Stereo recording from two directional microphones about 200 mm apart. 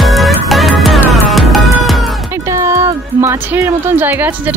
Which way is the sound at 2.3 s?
15° right (ahead or behind).